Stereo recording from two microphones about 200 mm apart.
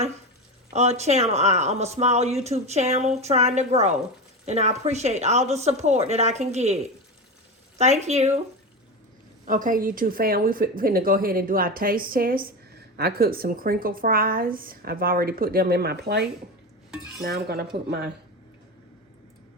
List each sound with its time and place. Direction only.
0.7 s speech: 35° right (ahead or behind)
7.8 s speech: 35° right (ahead or behind)
9.5 s speech: 40° right (ahead or behind)